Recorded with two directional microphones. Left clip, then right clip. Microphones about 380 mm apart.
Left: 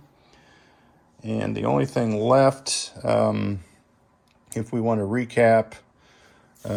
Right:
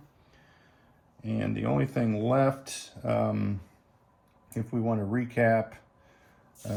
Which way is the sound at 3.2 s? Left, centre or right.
Left.